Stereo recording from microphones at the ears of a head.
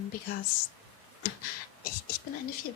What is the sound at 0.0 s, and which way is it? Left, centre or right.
A woman's voice, left.